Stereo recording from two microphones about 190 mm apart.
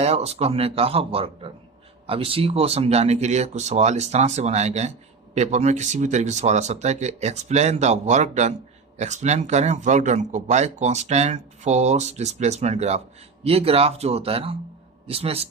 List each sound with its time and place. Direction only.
0.0 s speech: 35° right (ahead or behind)